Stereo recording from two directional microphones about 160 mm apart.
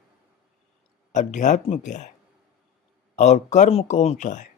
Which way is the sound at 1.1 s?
50° left (ahead or behind).